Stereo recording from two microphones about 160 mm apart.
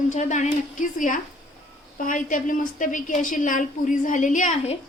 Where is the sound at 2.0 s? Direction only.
55° left (ahead or behind).